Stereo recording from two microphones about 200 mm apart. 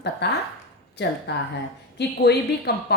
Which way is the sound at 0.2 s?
55° left (ahead or behind).